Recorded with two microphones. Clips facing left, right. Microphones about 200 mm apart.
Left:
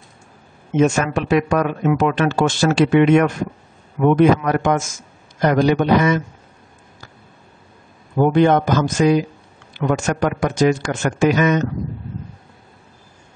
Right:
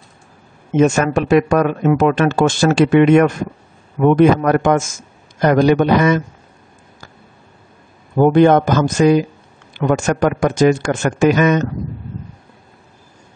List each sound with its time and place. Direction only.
0.7 s a man's voice: 45° right (ahead or behind)
8.2 s speech: 50° right (ahead or behind)